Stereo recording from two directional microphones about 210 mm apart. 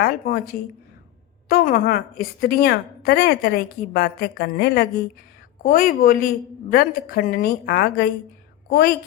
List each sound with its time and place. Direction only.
0.0 s a woman's voice: 45° left (ahead or behind)